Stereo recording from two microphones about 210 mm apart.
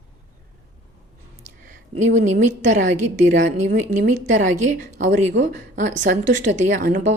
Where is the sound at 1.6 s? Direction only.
35° right (ahead or behind).